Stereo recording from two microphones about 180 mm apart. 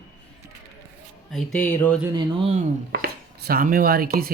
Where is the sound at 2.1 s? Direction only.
30° right (ahead or behind).